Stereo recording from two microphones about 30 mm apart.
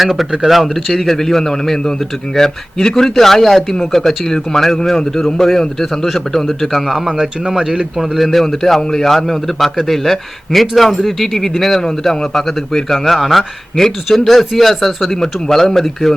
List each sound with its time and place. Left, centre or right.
0.0 s speech: centre
1.0 s a man's voice: centre
6.7 s speech: centre
7.2 s speech: centre
7.9 s a man's voice: centre